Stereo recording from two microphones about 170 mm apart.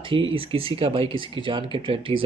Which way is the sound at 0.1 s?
30° right (ahead or behind).